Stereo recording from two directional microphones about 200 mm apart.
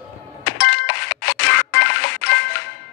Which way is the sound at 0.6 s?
60° left (ahead or behind).